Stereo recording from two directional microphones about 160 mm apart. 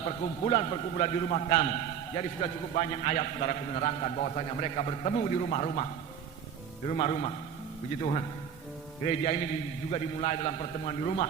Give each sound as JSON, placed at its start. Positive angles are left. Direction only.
{"t": 0.4, "sound": "a man's voice", "side_deg": 40}
{"t": 6.9, "sound": "a man's voice", "side_deg": 40}
{"t": 9.0, "sound": "a man's voice", "side_deg": 40}